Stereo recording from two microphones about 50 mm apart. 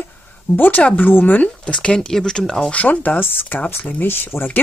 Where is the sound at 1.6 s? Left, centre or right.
Centre.